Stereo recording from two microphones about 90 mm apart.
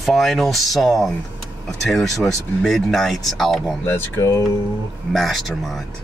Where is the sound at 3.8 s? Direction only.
30° left (ahead or behind).